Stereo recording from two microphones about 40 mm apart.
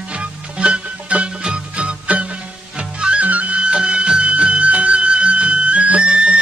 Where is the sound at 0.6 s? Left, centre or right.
Right.